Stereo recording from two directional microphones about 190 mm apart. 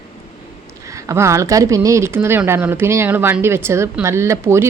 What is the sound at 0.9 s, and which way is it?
Speech, 15° right (ahead or behind).